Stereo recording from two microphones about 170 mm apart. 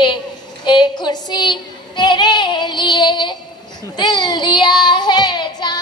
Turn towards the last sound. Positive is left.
turn(degrees=25)  # may be behind; listen again after turning